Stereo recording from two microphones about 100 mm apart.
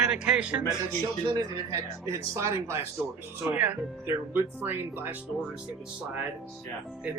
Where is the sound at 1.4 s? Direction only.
30° right (ahead or behind).